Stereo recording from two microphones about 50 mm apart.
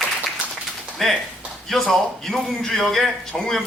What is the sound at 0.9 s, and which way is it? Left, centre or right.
A man's voice, centre.